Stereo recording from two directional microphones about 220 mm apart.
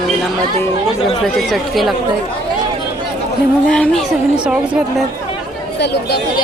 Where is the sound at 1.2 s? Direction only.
Centre (ahead or behind).